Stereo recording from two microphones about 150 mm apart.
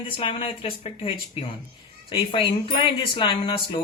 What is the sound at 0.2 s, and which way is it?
Speech, 35° left (ahead or behind).